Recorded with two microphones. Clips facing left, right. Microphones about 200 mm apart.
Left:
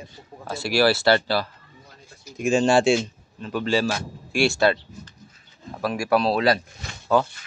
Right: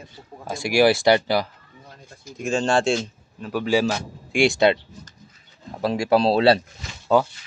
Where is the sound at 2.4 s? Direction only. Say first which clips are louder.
Left 3 dB; 10° left (ahead or behind).